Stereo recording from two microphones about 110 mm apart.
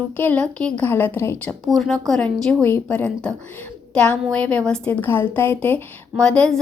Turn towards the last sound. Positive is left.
turn(degrees=10)  # may be behind; listen again after turning